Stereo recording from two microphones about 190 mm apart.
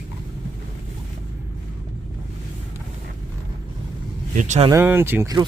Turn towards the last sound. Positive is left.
turn(degrees=-15)  # may be behind; listen again after turning